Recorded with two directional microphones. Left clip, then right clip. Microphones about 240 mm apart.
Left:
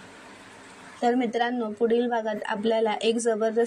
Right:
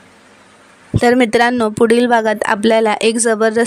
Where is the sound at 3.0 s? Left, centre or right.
Right.